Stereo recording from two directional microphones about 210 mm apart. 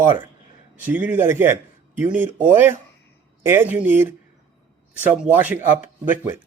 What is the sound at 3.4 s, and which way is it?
Speech, 10° right (ahead or behind).